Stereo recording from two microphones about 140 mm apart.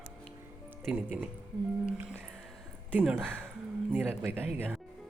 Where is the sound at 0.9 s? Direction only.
10° right (ahead or behind).